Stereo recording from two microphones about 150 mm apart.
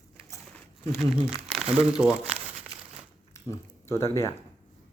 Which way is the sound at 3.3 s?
20° left (ahead or behind).